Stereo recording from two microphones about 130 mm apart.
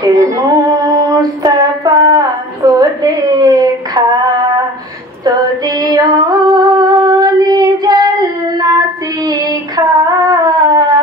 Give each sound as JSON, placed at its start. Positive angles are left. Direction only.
{"t": 0.0, "sound": "female singing", "side_deg": -25}
{"t": 5.8, "sound": "female singing", "side_deg": -30}
{"t": 9.3, "sound": "a sound", "side_deg": -30}